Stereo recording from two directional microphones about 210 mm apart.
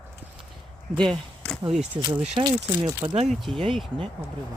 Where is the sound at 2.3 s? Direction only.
20° right (ahead or behind).